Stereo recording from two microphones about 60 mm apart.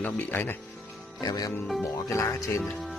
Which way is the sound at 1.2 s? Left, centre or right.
Left.